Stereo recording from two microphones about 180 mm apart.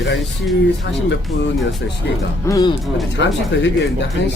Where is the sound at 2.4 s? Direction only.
20° left (ahead or behind).